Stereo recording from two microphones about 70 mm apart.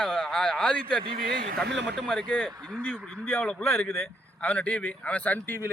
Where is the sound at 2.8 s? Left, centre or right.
Left.